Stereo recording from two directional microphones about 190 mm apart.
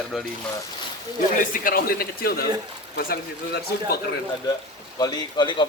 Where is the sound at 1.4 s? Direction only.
45° left (ahead or behind).